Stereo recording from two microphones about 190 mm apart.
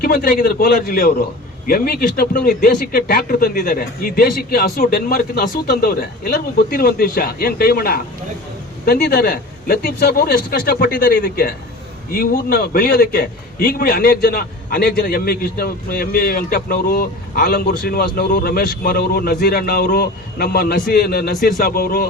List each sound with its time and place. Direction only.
0.0 s a man's voice: 50° left (ahead or behind)